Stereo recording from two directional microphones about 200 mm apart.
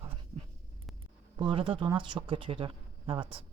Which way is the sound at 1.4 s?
25° right (ahead or behind).